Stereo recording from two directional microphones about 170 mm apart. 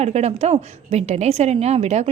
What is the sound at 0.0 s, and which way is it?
A woman's voice, 40° right (ahead or behind).